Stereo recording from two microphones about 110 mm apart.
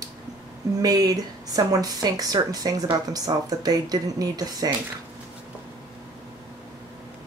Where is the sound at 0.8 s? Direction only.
35° right (ahead or behind).